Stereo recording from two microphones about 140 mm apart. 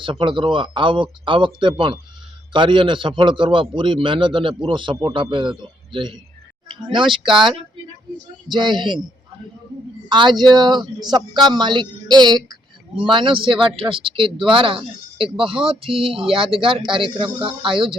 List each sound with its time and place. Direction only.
0.0 s speech: 35° right (ahead or behind)
8.4 s speech: 30° right (ahead or behind)
10.1 s speech: 35° right (ahead or behind)